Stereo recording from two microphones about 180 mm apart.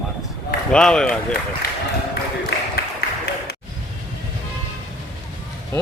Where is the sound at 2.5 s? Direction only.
70° left (ahead or behind).